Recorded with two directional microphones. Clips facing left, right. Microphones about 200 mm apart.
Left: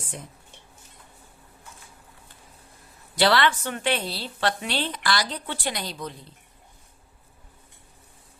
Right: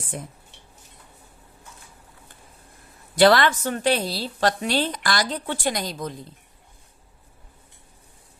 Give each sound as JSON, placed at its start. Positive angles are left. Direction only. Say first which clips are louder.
{"t": 3.2, "sound": "a woman's voice", "louder": "right 5 dB", "side_deg": -45}